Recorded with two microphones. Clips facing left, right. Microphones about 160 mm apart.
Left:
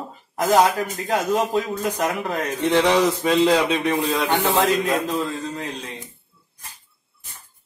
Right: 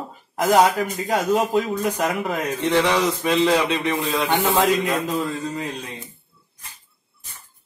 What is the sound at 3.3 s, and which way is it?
Speech, centre (ahead or behind).